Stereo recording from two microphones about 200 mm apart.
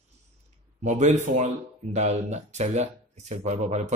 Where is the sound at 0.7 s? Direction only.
35° right (ahead or behind).